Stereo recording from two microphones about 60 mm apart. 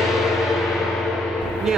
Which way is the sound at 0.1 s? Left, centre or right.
Centre.